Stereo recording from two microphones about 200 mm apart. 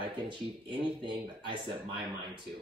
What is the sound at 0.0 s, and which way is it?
Speech, 25° right (ahead or behind).